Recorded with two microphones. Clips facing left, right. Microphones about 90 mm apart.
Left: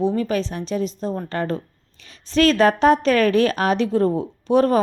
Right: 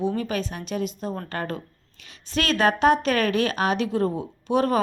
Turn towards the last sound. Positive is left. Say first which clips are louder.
# left 5 dB
turn(degrees=40)  # may be behind; listen again after turning